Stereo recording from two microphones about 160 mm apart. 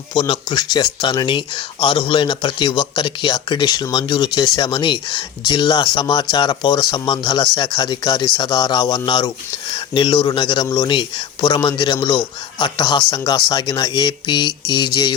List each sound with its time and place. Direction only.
0.1 s speech: 30° left (ahead or behind)